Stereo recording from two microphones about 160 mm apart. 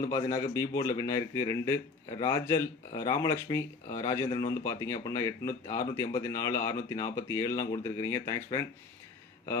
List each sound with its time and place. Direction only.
0.1 s speech: 20° left (ahead or behind)